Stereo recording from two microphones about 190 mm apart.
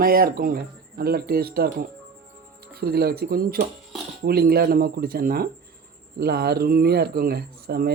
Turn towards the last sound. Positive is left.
turn(degrees=-55)  # may be behind; listen again after turning